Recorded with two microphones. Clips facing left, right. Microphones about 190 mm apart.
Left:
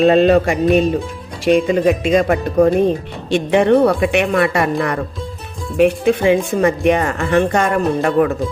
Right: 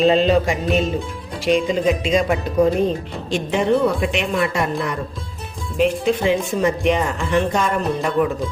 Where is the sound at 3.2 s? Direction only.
65° left (ahead or behind).